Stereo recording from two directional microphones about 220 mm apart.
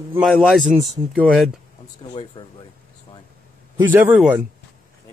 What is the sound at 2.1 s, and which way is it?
Speech, 25° left (ahead or behind).